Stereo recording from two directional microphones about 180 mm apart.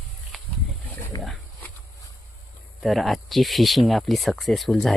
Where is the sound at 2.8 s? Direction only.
Centre (ahead or behind).